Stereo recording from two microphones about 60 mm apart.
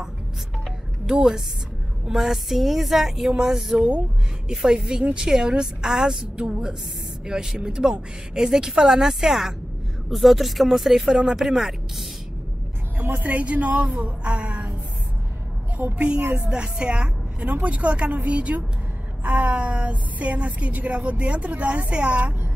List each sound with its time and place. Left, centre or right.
1.0 s speech: centre
2.0 s music: centre
4.5 s a woman's voice: centre
10.0 s music: centre
11.1 s a woman's voice: centre
13.0 s a woman's voice: right
15.8 s a woman's voice: centre
16.2 s speech: right
16.4 s a woman's voice: centre